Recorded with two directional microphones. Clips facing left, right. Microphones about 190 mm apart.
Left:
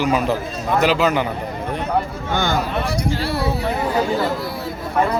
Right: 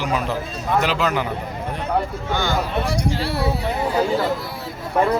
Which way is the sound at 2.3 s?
50° left (ahead or behind).